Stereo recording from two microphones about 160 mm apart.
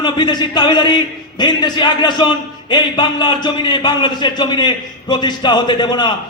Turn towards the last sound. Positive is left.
turn(degrees=30)  # may be behind; listen again after turning